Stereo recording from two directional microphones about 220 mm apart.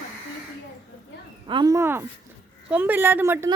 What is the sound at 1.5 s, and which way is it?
A woman's voice, 20° right (ahead or behind).